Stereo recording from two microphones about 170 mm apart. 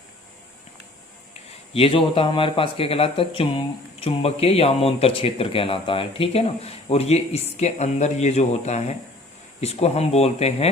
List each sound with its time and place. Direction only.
1.7 s speech: 35° left (ahead or behind)